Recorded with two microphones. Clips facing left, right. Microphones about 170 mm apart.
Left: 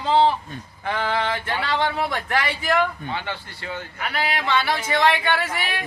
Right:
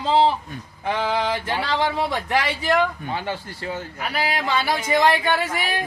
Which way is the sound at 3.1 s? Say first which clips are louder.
Right 2 dB; 40° right (ahead or behind).